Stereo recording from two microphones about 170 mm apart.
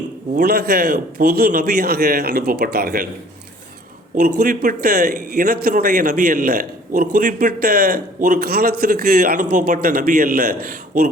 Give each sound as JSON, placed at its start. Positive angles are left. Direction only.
{"t": 0.3, "sound": "a man's voice", "side_deg": -65}
{"t": 4.4, "sound": "a man's voice", "side_deg": -55}